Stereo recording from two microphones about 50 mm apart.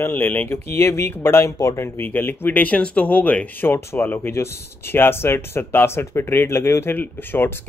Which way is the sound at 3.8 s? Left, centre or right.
Left.